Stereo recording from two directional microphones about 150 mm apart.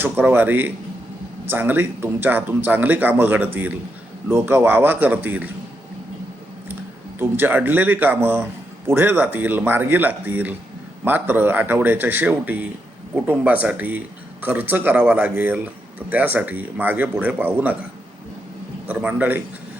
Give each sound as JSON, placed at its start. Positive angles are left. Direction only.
{"t": 0.0, "sound": "speech", "side_deg": -10}
{"t": 7.2, "sound": "speech", "side_deg": -15}
{"t": 18.9, "sound": "speech", "side_deg": -10}